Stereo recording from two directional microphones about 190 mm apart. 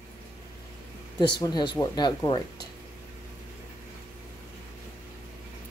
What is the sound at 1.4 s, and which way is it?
Speech, 20° left (ahead or behind).